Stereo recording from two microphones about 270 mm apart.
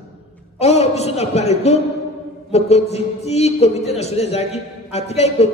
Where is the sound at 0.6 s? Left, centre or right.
Left.